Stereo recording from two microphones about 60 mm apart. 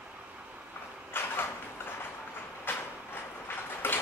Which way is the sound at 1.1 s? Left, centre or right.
Left.